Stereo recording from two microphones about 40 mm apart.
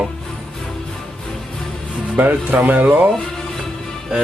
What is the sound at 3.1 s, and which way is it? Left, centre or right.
Music, centre.